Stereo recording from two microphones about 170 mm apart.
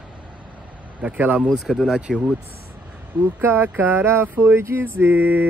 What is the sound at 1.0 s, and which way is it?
Speech, 10° right (ahead or behind).